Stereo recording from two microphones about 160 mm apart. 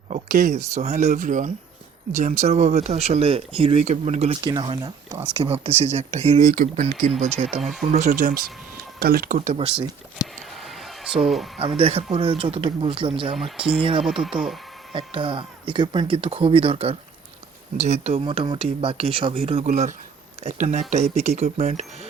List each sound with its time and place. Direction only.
0.1 s a sound: 55° right (ahead or behind)
0.7 s speech: 45° right (ahead or behind)
4.4 s speech: 25° right (ahead or behind)
5.3 s speech: 35° right (ahead or behind)
6.5 s speech: 60° right (ahead or behind)
9.0 s speech: 70° right (ahead or behind)
9.6 s speech: 35° right (ahead or behind)
10.2 s a sound: 25° left (ahead or behind)
10.6 s a sound: centre (ahead or behind)
11.8 s speech: 35° right (ahead or behind)
14.0 s speech: centre (ahead or behind)
14.9 s speech: 35° right (ahead or behind)